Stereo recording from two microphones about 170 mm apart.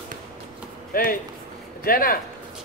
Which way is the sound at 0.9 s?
60° left (ahead or behind).